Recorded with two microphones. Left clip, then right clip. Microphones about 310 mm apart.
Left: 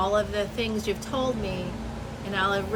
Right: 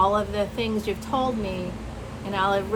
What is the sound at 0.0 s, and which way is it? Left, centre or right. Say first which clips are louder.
Speech: right 3 dB; centre.